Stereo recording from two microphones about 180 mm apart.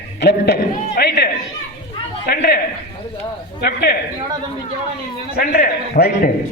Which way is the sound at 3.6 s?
60° left (ahead or behind).